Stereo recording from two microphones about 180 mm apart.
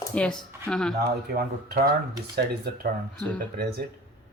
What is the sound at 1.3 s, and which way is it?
Speech, 60° right (ahead or behind).